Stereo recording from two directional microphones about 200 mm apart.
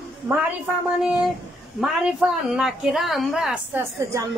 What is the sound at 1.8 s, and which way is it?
A woman's voice, centre (ahead or behind).